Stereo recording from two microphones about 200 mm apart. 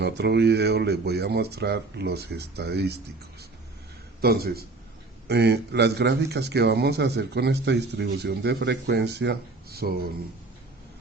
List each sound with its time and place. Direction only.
0.0 s a man's voice: 55° right (ahead or behind)
4.2 s a man's voice: 50° right (ahead or behind)